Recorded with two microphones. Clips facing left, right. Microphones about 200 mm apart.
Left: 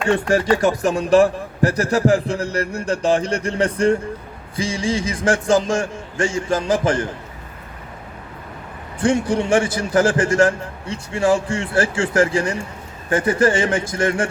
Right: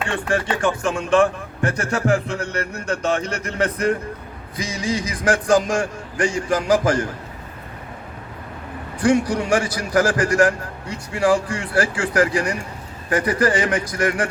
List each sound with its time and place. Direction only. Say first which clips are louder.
0.1 s a man's voice: left 8 dB; 40° left (ahead or behind)
9.0 s a man's voice: even; 25° left (ahead or behind)